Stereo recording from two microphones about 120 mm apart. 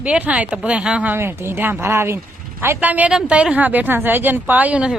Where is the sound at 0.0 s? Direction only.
10° right (ahead or behind).